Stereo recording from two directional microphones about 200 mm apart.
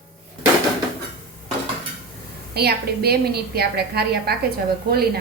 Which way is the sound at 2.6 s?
50° right (ahead or behind).